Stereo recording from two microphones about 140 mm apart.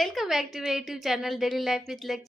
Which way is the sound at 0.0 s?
Centre (ahead or behind).